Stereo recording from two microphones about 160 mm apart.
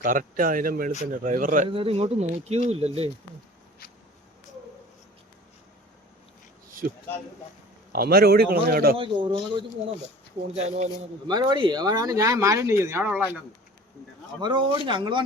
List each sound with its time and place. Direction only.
0.0 s speech: 55° right (ahead or behind)
1.7 s speech: 35° right (ahead or behind)
6.8 s speech: 70° right (ahead or behind)
9.0 s speech: 30° right (ahead or behind)
10.5 s speech: 45° right (ahead or behind)
11.3 s speech: 25° right (ahead or behind); by 13.2 s 10° right (ahead or behind)
14.4 s speech: 30° right (ahead or behind)